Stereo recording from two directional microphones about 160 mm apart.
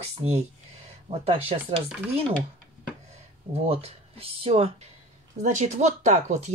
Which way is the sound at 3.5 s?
40° right (ahead or behind).